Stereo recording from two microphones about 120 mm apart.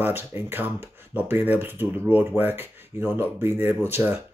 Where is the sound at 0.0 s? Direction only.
20° right (ahead or behind).